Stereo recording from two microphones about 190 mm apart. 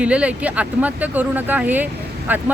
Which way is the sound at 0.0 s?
5° right (ahead or behind).